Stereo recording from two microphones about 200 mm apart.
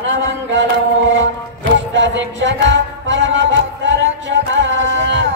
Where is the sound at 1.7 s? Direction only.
65° right (ahead or behind).